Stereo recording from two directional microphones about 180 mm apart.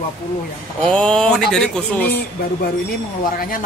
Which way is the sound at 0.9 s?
5° left (ahead or behind).